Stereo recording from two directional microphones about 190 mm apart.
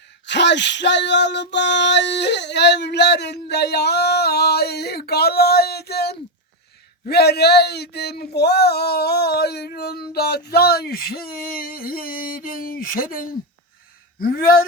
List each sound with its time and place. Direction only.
0.3 s speech: 65° left (ahead or behind); by 14.7 s 50° left (ahead or behind)